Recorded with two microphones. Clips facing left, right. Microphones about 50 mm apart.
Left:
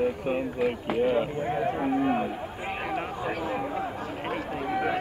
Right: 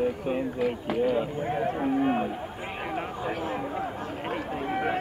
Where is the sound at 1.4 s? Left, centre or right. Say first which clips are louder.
Even; centre.